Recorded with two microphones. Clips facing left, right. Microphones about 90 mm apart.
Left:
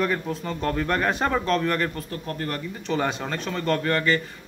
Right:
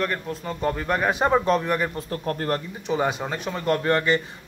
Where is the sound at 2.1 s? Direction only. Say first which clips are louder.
Right 5 dB; 40° right (ahead or behind).